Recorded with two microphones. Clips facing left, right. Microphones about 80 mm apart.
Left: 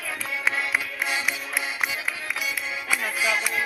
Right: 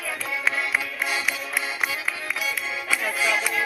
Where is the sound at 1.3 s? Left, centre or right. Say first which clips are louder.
Right 1 dB; centre.